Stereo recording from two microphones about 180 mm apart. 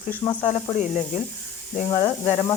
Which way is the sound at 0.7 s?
40° left (ahead or behind).